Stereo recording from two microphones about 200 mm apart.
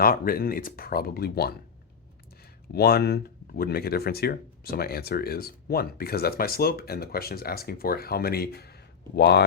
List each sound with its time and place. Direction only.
0.0 s speech: 45° left (ahead or behind)
2.7 s speech: 50° left (ahead or behind)